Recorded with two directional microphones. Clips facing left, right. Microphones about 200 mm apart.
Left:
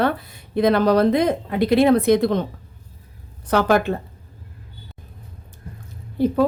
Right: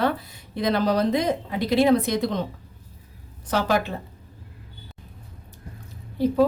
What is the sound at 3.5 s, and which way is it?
Speech, 55° left (ahead or behind).